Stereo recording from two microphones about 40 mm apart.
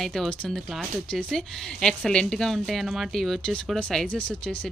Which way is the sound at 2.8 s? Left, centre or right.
Centre.